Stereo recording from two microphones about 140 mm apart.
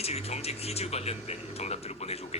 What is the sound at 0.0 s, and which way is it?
Speech, 45° left (ahead or behind).